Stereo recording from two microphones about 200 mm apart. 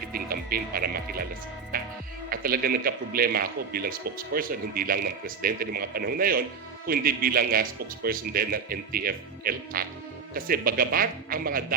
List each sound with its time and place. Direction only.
0.1 s speech: 45° right (ahead or behind)
1.7 s music: 45° right (ahead or behind)
2.3 s speech: 45° right (ahead or behind)